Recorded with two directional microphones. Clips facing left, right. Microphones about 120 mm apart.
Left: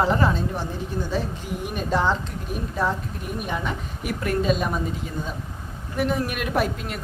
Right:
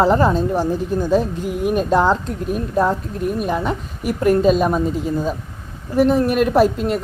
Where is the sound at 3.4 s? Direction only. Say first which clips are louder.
Right 3 dB; 40° right (ahead or behind).